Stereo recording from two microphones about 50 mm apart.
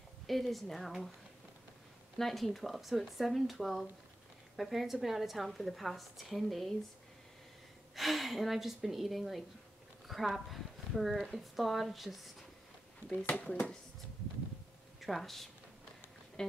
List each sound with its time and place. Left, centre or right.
0.3 s a woman's voice: centre
2.1 s a woman's voice: centre
7.9 s a woman's voice: centre
13.4 s speech: left
15.0 s speech: centre
16.4 s a sound: centre